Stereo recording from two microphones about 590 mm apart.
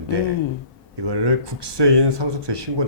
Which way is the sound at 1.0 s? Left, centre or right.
Right.